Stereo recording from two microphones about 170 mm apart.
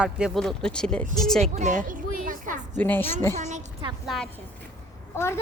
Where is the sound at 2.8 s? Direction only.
10° left (ahead or behind).